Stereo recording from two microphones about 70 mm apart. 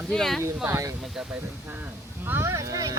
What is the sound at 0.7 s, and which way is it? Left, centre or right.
Speech, right.